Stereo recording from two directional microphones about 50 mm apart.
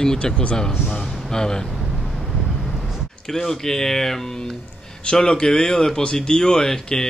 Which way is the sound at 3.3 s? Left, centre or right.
Centre.